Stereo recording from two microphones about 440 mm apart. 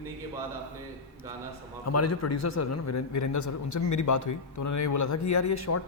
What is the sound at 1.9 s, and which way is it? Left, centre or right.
A man's voice, left.